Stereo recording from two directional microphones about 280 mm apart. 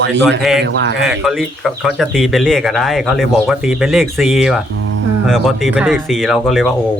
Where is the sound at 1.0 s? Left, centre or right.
Centre.